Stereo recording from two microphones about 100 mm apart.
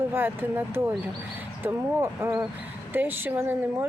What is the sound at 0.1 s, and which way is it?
Speech, 20° right (ahead or behind).